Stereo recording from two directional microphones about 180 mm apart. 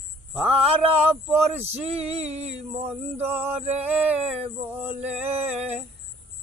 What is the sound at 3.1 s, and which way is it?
Mantra, 10° right (ahead or behind).